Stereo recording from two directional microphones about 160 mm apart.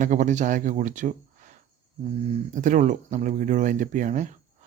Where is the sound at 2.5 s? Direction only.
50° right (ahead or behind).